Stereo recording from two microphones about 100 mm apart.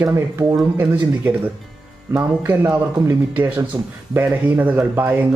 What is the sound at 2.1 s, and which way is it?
Speech, 25° right (ahead or behind).